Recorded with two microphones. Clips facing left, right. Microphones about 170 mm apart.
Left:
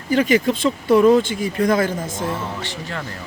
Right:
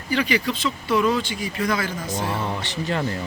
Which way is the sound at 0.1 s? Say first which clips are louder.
Left 6 dB; 45° left (ahead or behind).